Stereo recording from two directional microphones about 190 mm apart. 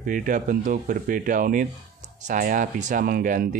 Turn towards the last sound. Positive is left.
turn(degrees=-45)  # may be behind; listen again after turning